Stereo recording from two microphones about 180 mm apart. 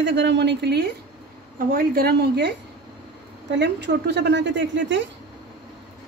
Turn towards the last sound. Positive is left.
turn(degrees=-80)